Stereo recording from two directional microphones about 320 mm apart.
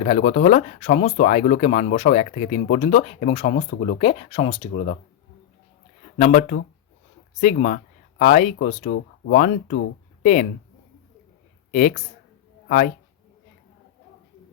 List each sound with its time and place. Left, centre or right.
0.0 s speech: centre
6.1 s speech: left
11.7 s speech: left